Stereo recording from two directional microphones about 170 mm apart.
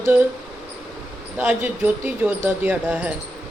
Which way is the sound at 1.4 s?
10° right (ahead or behind).